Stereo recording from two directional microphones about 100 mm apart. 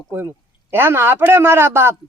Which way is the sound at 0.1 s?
25° right (ahead or behind).